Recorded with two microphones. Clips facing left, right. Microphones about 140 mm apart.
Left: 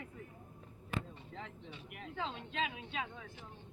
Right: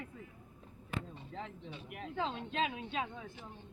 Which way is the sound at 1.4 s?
35° right (ahead or behind).